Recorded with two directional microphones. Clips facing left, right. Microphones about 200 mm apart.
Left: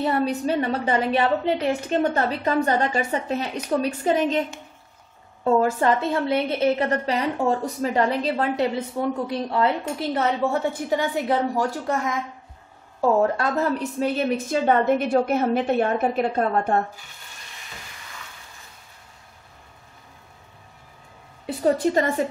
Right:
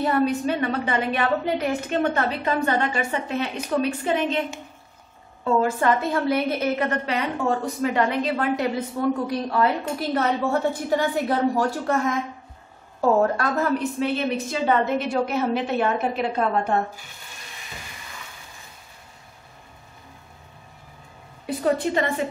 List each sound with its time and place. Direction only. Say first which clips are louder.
0.0 s a woman's voice: right 1 dB; 30° left (ahead or behind)
5.4 s a woman's voice: left 2 dB; 35° left (ahead or behind); by 11.8 s 20° left (ahead or behind)
13.2 s a woman's voice: even; 25° left (ahead or behind)
13.9 s a woman's voice: left 1 dB; 40° left (ahead or behind)
21.5 s a woman's voice: left 2 dB; 40° left (ahead or behind)